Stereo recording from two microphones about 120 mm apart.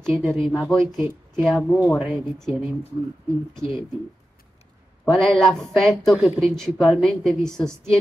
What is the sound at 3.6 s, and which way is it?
Speech, 45° left (ahead or behind).